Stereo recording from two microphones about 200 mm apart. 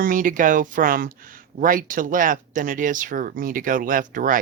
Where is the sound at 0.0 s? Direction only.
45° right (ahead or behind).